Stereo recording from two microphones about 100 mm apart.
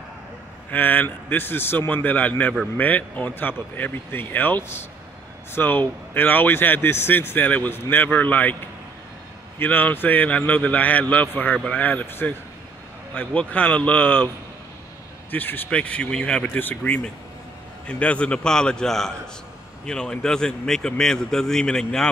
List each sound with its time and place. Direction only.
0.7 s a man's voice: 20° left (ahead or behind)
9.6 s a man's voice: 15° left (ahead or behind)
15.3 s a man's voice: 20° left (ahead or behind)